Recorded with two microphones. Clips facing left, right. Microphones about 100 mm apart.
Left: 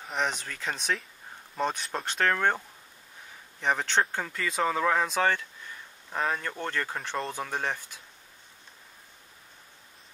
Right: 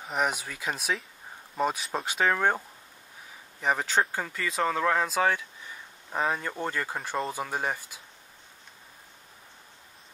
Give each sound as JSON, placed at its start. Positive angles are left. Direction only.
{"t": 0.0, "sound": "speech", "side_deg": -10}
{"t": 3.6, "sound": "speech", "side_deg": -5}